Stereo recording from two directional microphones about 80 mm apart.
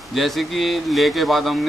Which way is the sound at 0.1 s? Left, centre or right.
Centre.